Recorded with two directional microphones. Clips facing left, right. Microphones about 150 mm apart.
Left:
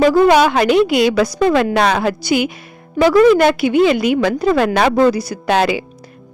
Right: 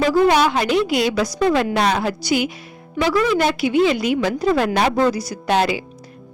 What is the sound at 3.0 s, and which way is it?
A woman's voice, 50° left (ahead or behind).